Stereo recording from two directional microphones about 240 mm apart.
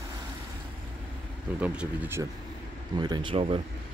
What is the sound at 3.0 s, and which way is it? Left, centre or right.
Speech, centre.